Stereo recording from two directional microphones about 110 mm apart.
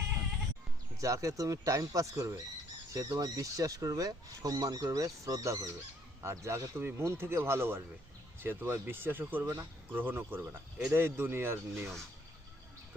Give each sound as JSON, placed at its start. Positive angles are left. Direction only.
{"t": 1.0, "sound": "speech", "side_deg": -30}